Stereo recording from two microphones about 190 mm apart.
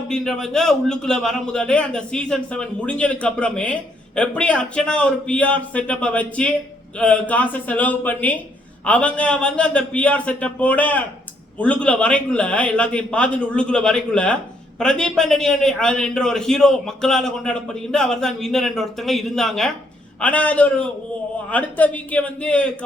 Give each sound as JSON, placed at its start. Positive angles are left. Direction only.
{"t": 0.1, "sound": "a man's voice", "side_deg": 5}